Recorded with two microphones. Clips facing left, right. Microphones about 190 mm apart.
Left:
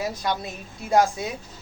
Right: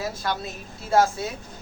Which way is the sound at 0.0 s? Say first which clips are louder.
Left 1 dB; 15° left (ahead or behind).